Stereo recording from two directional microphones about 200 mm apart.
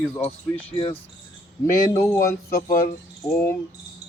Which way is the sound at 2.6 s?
40° left (ahead or behind).